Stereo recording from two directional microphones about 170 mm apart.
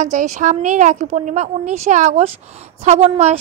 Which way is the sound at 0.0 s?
45° right (ahead or behind).